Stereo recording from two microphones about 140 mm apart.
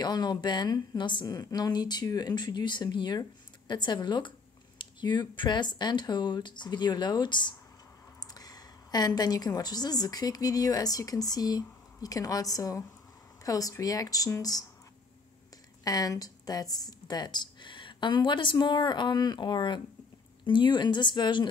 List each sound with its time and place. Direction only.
0.0 s a woman's voice: 30° left (ahead or behind)
15.8 s a woman's voice: 25° left (ahead or behind)